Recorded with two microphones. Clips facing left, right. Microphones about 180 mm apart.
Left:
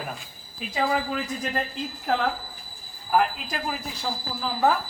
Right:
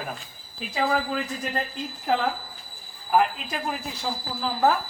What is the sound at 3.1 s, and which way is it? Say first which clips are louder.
A woman's voice: right 1 dB; centre (ahead or behind).